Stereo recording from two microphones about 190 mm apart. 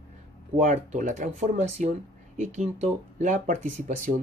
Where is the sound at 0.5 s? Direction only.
40° right (ahead or behind).